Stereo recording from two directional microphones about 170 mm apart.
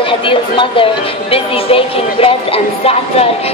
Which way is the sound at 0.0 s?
30° left (ahead or behind).